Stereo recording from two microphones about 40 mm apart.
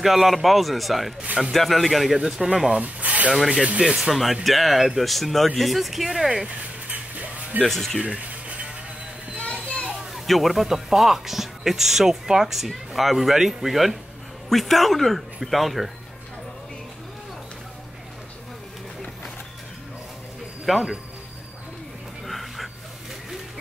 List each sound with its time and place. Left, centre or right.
0.0 s speech: centre
2.2 s speech: centre
2.8 s rub: right
4.1 s speech: centre
6.9 s music: right
7.6 s speech: centre
8.0 s music: right
9.4 s children playing: left
10.2 s speech: centre
20.6 s speech: centre
22.2 s pant: centre